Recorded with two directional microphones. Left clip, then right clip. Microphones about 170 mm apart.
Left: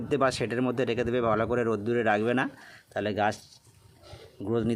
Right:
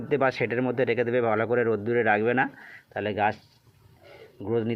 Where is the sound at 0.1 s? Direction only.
15° left (ahead or behind).